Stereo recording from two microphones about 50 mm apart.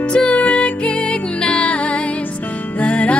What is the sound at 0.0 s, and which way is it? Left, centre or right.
Music, left.